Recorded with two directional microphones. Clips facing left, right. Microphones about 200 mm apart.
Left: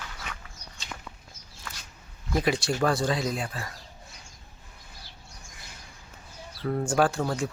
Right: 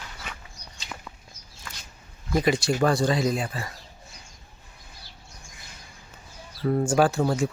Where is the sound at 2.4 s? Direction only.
Centre (ahead or behind).